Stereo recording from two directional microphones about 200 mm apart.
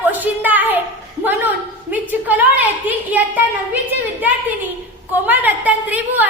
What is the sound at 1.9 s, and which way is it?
A woman's voice, 10° right (ahead or behind).